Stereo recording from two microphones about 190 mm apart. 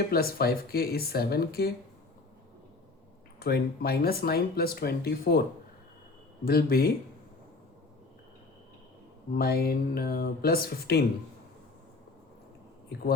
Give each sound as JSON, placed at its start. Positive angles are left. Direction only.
{"t": 0.1, "sound": "speech", "side_deg": 55}
{"t": 3.4, "sound": "speech", "side_deg": 55}
{"t": 6.4, "sound": "speech", "side_deg": 55}
{"t": 9.3, "sound": "speech", "side_deg": 55}